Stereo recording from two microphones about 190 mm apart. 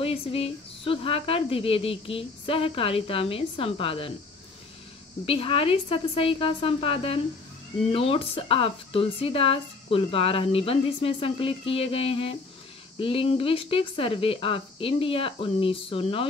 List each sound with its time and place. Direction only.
0.0 s speech: 30° left (ahead or behind)
5.2 s speech: 30° left (ahead or behind)